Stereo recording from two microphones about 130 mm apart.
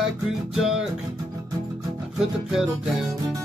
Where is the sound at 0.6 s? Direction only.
5° right (ahead or behind).